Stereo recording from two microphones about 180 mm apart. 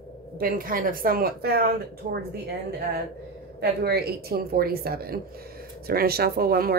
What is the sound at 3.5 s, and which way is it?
Speech, 60° right (ahead or behind).